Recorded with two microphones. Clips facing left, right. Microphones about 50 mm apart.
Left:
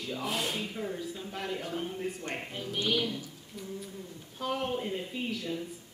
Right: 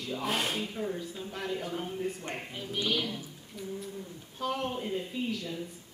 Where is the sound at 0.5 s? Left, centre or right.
Centre.